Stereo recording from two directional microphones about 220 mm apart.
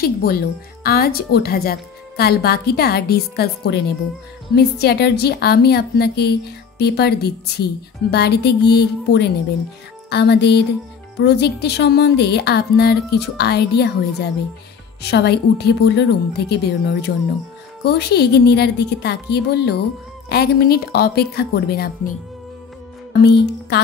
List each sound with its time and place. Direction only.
0.0 s speech: 45° left (ahead or behind)
23.2 s music: 50° left (ahead or behind)